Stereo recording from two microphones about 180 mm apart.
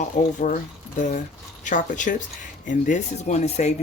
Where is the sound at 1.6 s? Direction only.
45° left (ahead or behind).